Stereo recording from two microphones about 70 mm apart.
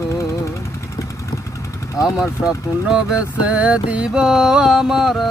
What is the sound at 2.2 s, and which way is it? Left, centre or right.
Speech, left.